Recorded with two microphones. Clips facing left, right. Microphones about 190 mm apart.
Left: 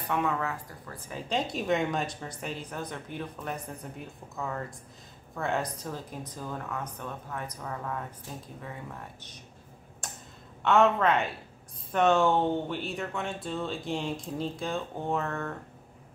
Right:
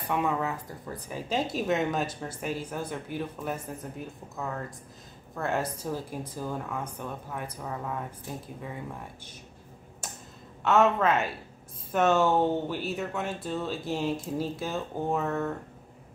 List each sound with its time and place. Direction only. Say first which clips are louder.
0.1 s speech: right 1 dB; 15° right (ahead or behind)
1.0 s speech: right 1 dB; 5° right (ahead or behind)
10.0 s a sound: right 1 dB; 5° right (ahead or behind)
10.6 s speech: even; centre (ahead or behind)